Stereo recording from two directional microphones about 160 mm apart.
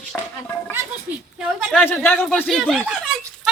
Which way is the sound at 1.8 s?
5° left (ahead or behind).